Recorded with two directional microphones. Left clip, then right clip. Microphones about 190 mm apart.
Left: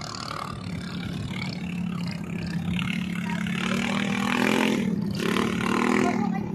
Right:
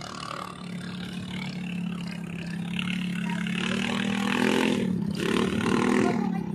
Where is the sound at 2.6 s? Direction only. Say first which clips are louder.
Left 1 dB; 30° left (ahead or behind).